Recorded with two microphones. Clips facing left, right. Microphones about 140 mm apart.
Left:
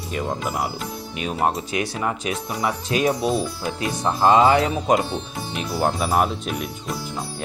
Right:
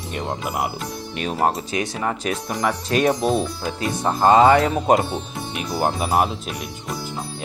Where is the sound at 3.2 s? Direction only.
5° left (ahead or behind).